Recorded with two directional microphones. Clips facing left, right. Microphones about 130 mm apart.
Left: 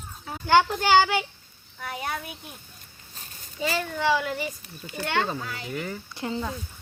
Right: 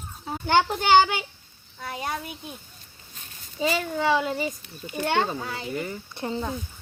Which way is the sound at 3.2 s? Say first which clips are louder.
Left 2 dB; 35° left (ahead or behind).